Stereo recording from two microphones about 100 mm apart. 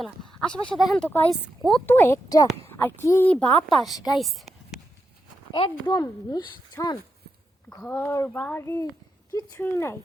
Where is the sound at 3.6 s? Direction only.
Centre (ahead or behind).